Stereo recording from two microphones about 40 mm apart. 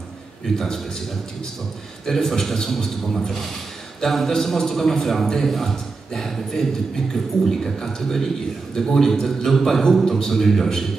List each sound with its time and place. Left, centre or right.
2.0 s a man's voice: centre